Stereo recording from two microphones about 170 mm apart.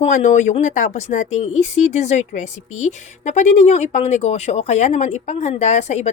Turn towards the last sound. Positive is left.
turn(degrees=40)  # may be behind; listen again after turning